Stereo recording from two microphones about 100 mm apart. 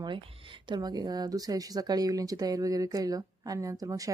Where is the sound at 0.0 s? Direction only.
55° right (ahead or behind).